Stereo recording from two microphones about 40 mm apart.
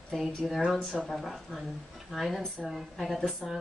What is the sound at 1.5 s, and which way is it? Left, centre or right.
A woman's voice, centre.